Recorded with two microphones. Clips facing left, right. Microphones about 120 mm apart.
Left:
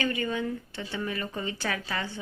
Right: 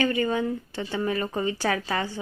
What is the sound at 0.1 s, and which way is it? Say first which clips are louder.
Speech: right 5 dB; 30° right (ahead or behind).